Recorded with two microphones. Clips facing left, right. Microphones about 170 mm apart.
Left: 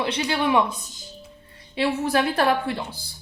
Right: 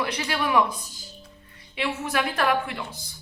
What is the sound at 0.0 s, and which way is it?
Speech, 25° left (ahead or behind).